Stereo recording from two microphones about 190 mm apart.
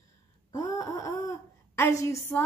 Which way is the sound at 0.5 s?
20° left (ahead or behind).